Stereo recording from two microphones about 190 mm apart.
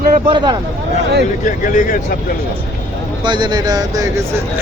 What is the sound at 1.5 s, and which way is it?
Speech, 40° left (ahead or behind).